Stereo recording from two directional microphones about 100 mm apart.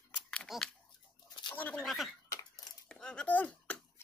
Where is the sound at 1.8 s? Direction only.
Centre (ahead or behind).